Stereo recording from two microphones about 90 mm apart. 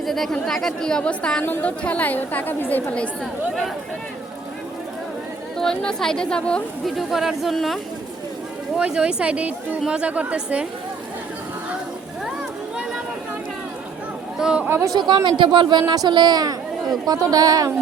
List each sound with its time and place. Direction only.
0.0 s a woman's voice: centre (ahead or behind)
5.5 s a woman's voice: 5° left (ahead or behind)
6.9 s a woman's voice: 5° right (ahead or behind)
14.3 s speech: 10° right (ahead or behind)
14.9 s speech: 60° right (ahead or behind)